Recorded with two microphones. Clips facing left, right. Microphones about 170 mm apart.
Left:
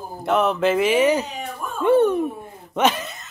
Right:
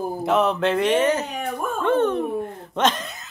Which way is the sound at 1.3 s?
55° right (ahead or behind).